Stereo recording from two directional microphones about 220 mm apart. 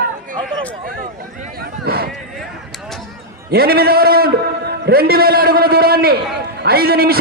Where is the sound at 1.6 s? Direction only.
45° right (ahead or behind).